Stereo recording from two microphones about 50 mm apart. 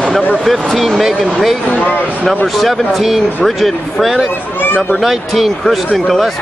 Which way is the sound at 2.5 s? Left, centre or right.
Centre.